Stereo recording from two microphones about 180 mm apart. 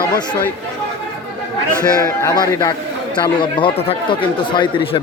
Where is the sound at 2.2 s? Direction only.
20° left (ahead or behind).